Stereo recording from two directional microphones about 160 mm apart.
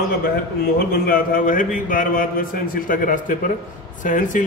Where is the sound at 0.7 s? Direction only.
70° left (ahead or behind).